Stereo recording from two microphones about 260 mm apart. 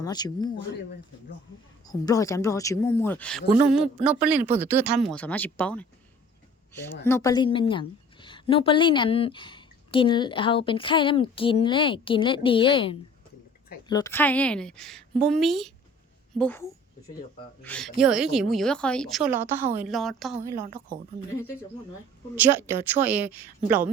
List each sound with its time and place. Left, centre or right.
0.0 s speech: centre
1.9 s a woman's voice: centre
22.4 s a woman's voice: centre